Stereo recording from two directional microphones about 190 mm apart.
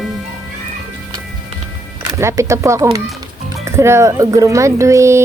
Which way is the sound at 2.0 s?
15° right (ahead or behind).